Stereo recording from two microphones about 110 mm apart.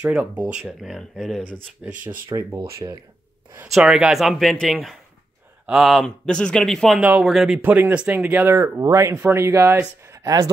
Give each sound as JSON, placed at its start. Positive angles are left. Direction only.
{"t": 0.0, "sound": "speech", "side_deg": -10}
{"t": 0.6, "sound": "a man's voice", "side_deg": 0}
{"t": 2.3, "sound": "speech", "side_deg": -40}
{"t": 3.7, "sound": "a man's voice", "side_deg": -5}
{"t": 7.0, "sound": "speech", "side_deg": -10}
{"t": 7.6, "sound": "speech", "side_deg": -15}